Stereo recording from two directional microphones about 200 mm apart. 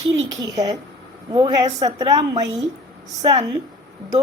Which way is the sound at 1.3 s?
20° right (ahead or behind).